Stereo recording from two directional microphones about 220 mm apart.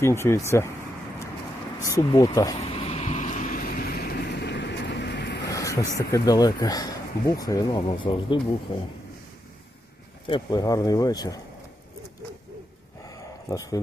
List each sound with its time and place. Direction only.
0.0 s speech: 10° left (ahead or behind)
1.8 s speech: 15° left (ahead or behind)
2.6 s vehicle: 25° left (ahead or behind); by 5.4 s 50° left (ahead or behind)
5.5 s a man's voice: 15° left (ahead or behind)
10.2 s speech: 20° left (ahead or behind)
13.1 s a sound: 15° left (ahead or behind)